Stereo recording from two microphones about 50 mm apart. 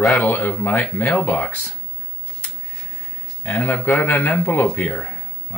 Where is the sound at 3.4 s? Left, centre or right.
Left.